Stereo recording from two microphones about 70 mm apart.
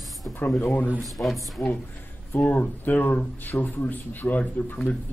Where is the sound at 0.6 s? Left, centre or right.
Left.